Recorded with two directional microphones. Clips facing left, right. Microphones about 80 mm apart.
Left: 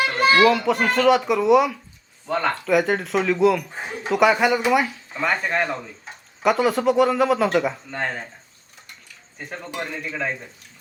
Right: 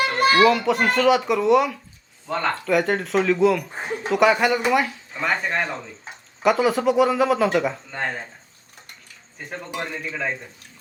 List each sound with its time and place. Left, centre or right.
0.2 s children playing: right
0.4 s speech: centre
10.0 s speech: centre